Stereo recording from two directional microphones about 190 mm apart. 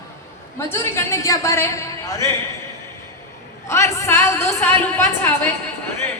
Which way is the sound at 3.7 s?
15° left (ahead or behind).